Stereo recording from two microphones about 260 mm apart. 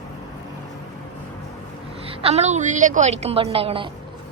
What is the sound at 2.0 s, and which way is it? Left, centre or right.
A woman's voice, right.